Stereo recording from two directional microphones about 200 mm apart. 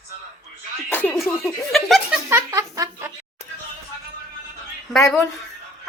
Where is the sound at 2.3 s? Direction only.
15° right (ahead or behind).